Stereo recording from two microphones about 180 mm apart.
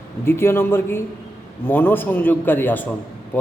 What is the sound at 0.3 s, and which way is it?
A man's voice, 15° left (ahead or behind).